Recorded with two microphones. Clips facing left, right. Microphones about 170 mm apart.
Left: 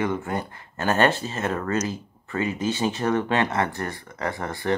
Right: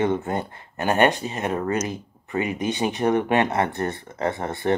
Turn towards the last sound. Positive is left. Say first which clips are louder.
# right 3 dB
turn(degrees=-25)  # may be behind; listen again after turning